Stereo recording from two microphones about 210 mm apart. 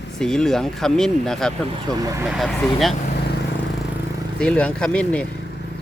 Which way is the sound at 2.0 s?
15° right (ahead or behind).